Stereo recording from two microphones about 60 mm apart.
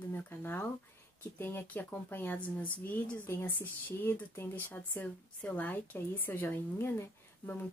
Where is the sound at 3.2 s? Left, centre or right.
Left.